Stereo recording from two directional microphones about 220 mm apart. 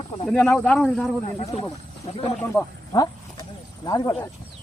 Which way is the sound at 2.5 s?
15° left (ahead or behind).